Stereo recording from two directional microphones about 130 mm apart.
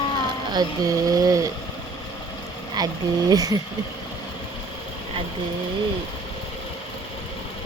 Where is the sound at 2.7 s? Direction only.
30° right (ahead or behind).